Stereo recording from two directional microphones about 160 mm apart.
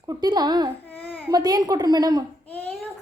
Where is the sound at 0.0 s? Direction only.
25° right (ahead or behind).